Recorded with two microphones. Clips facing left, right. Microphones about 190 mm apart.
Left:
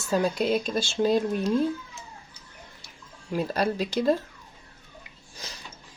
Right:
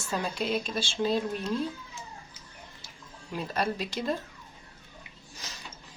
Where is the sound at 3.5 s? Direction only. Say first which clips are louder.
Left 3 dB; 35° left (ahead or behind).